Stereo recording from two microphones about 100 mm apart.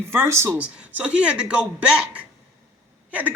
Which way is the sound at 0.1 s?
25° right (ahead or behind).